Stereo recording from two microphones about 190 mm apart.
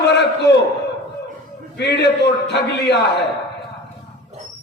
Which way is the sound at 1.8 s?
60° left (ahead or behind).